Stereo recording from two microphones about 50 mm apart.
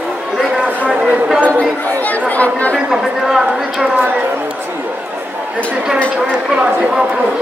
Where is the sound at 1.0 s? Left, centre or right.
Right.